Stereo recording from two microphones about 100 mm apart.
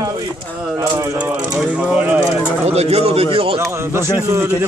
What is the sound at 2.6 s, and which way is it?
Speech, 90° right.